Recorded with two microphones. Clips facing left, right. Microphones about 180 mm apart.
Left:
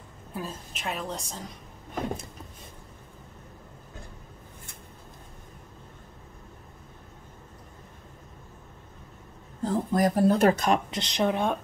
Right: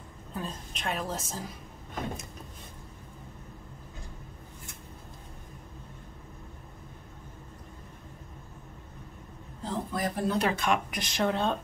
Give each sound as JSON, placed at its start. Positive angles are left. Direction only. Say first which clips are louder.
{"t": 0.3, "sound": "a woman's voice", "louder": "left 1 dB", "side_deg": 5}
{"t": 9.6, "sound": "speech", "louder": "left 8 dB", "side_deg": 45}
{"t": 10.9, "sound": "a woman's voice", "louder": "left 3 dB", "side_deg": 20}